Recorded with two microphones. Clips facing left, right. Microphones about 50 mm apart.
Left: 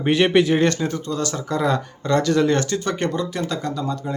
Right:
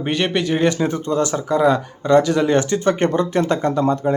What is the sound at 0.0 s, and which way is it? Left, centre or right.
Speech, centre.